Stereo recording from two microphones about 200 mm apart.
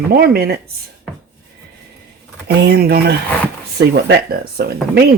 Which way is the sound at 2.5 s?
50° right (ahead or behind).